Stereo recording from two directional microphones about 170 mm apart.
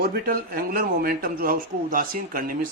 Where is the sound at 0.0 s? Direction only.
60° right (ahead or behind).